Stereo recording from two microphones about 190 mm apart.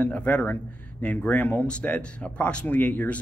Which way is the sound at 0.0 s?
5° left (ahead or behind).